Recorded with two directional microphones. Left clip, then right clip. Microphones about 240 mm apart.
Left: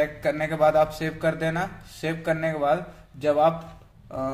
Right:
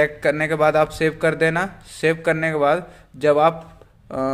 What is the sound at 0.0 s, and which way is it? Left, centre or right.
A man's voice, right.